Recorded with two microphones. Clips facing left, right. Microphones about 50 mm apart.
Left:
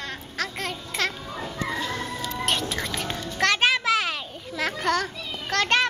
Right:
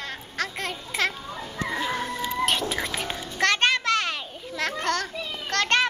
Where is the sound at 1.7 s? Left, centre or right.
Centre.